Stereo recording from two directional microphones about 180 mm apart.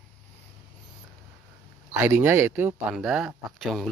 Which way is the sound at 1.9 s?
15° right (ahead or behind).